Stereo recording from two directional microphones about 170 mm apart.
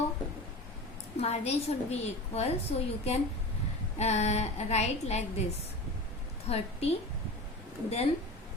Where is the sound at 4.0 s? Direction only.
40° left (ahead or behind).